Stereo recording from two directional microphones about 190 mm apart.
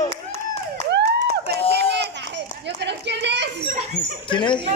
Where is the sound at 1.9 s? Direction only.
65° right (ahead or behind).